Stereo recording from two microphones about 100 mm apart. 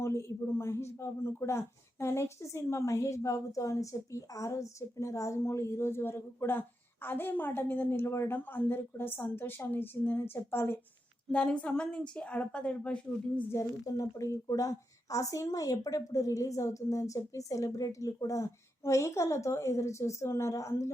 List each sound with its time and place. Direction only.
0.0 s speech: 30° left (ahead or behind)
11.3 s a woman's voice: 10° left (ahead or behind)
13.5 s speech: 35° left (ahead or behind)